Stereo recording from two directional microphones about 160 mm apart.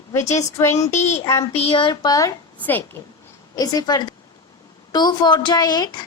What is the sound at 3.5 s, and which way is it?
A woman's voice, 25° left (ahead or behind).